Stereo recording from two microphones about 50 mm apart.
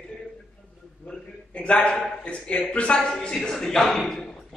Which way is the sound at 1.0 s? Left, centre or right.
Left.